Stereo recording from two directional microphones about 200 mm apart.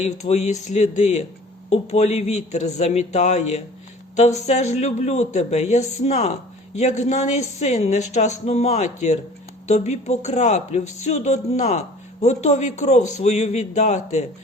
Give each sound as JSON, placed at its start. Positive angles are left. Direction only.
{"t": 0.0, "sound": "speech", "side_deg": 35}